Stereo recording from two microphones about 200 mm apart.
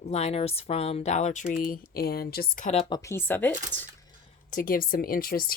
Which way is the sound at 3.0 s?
10° left (ahead or behind).